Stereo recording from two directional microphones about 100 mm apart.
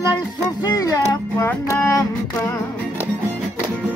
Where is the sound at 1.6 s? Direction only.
25° left (ahead or behind).